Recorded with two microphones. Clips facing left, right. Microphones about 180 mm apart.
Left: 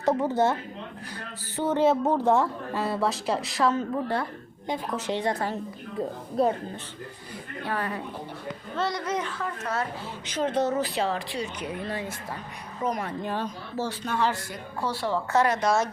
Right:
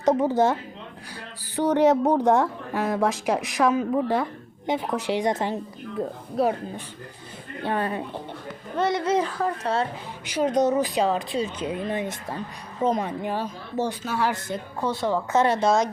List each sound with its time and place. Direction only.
0.0 s a woman's voice: 20° right (ahead or behind)
1.5 s a woman's voice: 15° right (ahead or behind)
6.0 s a woman's voice: centre (ahead or behind)
7.6 s a woman's voice: 25° right (ahead or behind)
10.2 s a woman's voice: 10° right (ahead or behind)
14.3 s a woman's voice: 20° right (ahead or behind)